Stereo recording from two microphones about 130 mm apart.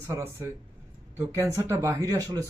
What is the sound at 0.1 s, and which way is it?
Speech, 20° right (ahead or behind).